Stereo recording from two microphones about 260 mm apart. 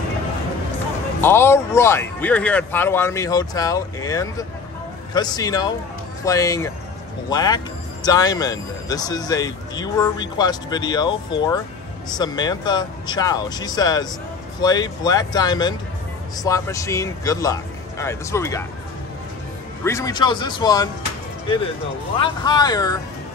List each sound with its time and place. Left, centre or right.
1.2 s speech: centre
19.8 s speech: centre
22.2 s speech: centre